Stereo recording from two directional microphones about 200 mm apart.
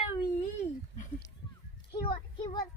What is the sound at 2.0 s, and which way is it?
Speech, 25° left (ahead or behind).